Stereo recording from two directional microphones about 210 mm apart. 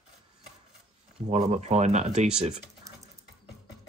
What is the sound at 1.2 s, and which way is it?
Speech, 35° right (ahead or behind).